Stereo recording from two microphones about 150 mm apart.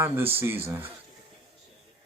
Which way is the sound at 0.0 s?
15° right (ahead or behind).